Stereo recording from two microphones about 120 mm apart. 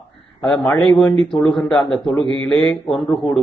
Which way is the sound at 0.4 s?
5° left (ahead or behind).